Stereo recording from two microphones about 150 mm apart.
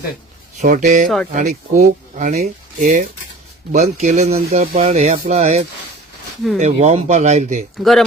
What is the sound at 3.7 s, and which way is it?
Speech, 50° right (ahead or behind).